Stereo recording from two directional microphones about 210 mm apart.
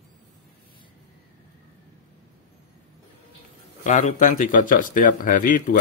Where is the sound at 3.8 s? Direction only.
35° left (ahead or behind).